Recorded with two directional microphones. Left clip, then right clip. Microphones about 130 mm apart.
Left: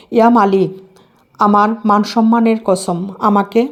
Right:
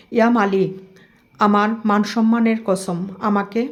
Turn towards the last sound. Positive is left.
turn(degrees=45)  # may be behind; listen again after turning